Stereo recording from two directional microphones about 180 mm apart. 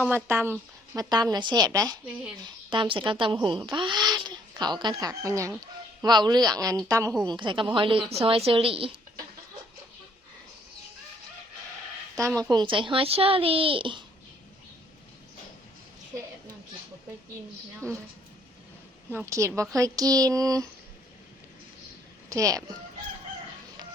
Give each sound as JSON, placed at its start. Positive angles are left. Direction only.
{"t": 0.1, "sound": "a woman's voice", "side_deg": -10}
{"t": 0.9, "sound": "a child's voice", "side_deg": -20}
{"t": 12.4, "sound": "a child's voice", "side_deg": -25}
{"t": 17.7, "sound": "a woman's voice", "side_deg": 5}
{"t": 19.1, "sound": "a woman's voice", "side_deg": -15}
{"t": 22.3, "sound": "speech", "side_deg": -20}